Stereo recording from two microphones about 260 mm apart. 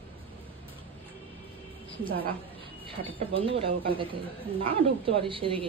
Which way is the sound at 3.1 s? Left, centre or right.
Right.